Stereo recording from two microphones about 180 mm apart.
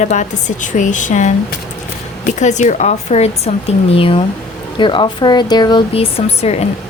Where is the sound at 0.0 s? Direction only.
40° left (ahead or behind).